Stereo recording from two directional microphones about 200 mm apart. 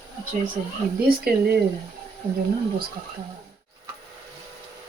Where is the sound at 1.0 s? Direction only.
50° right (ahead or behind).